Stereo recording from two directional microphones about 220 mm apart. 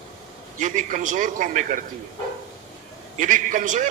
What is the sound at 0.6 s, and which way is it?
A man's voice, 35° right (ahead or behind).